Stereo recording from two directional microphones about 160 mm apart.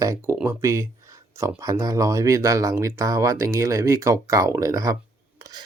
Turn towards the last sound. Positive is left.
turn(degrees=-25)  # may be behind; listen again after turning